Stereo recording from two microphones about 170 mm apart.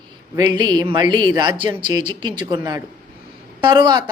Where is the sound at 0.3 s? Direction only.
25° right (ahead or behind).